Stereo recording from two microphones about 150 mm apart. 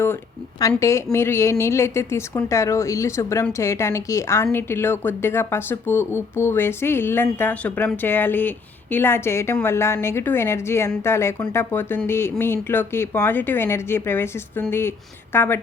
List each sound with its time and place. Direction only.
0.8 s a woman's voice: 20° left (ahead or behind)